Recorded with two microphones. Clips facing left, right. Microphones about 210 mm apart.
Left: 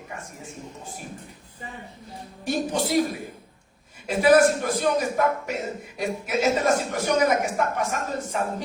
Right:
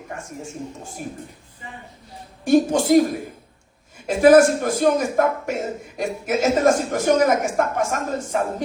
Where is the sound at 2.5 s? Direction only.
45° right (ahead or behind).